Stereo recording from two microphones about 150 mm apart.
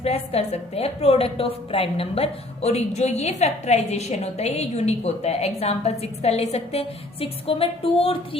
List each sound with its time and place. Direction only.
0.0 s a woman's voice: 45° left (ahead or behind)